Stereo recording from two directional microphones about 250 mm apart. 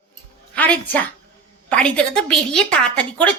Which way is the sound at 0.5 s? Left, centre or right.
Centre.